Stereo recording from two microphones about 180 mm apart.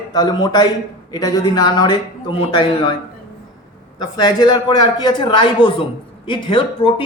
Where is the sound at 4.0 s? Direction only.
25° left (ahead or behind).